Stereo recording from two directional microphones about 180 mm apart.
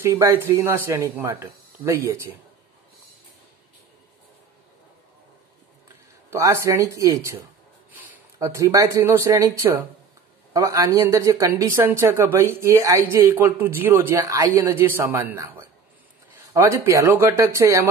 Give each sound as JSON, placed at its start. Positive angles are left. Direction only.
{"t": 0.0, "sound": "speech", "side_deg": -15}
{"t": 6.3, "sound": "speech", "side_deg": -15}